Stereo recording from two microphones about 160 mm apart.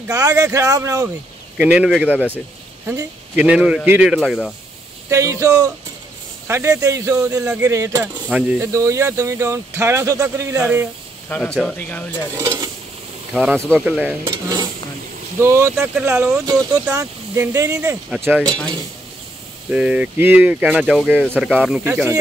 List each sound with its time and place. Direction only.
0.1 s speech: 20° right (ahead or behind)
1.6 s a man's voice: 5° right (ahead or behind)
5.1 s speech: 20° right (ahead or behind)
8.3 s speech: 5° right (ahead or behind)
8.7 s speech: 20° right (ahead or behind)
11.2 s speech: 10° left (ahead or behind)
12.4 s speech: 25° right (ahead or behind)
13.3 s a man's voice: 5° right (ahead or behind)
14.2 s stir: 25° right (ahead or behind)
15.3 s speech: 15° right (ahead or behind)
17.0 s speech: 10° right (ahead or behind)
19.7 s speech: 10° right (ahead or behind)